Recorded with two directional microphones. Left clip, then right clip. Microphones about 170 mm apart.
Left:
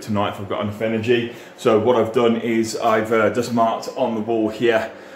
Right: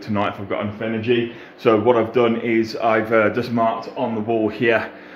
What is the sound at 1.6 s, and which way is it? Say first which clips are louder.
Speech: even; 10° right (ahead or behind).